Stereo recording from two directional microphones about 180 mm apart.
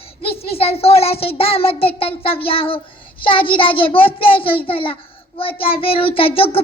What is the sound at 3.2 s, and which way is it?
A child's voice, 30° left (ahead or behind).